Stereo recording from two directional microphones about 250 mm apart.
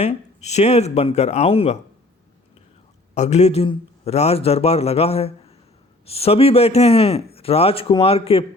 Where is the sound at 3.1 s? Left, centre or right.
Left.